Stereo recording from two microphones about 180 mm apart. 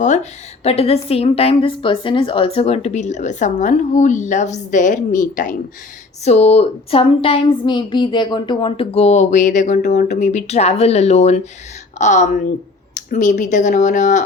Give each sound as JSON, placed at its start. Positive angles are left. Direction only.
{"t": 0.0, "sound": "a woman's voice", "side_deg": 40}
{"t": 6.2, "sound": "a woman's voice", "side_deg": 35}